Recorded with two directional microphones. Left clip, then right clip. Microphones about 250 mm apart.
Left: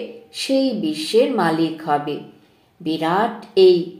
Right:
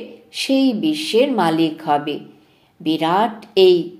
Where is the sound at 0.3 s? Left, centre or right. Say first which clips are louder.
Right 2 dB; right.